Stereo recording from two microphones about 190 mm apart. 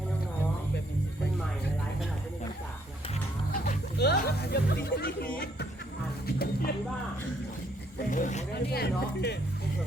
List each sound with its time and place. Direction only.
4.0 s speech: 55° left (ahead or behind)
6.2 s a sound: 55° left (ahead or behind)
8.1 s speech: 40° left (ahead or behind)
8.7 s speech: 60° left (ahead or behind)